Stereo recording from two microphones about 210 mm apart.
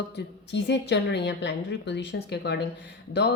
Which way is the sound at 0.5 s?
55° left (ahead or behind).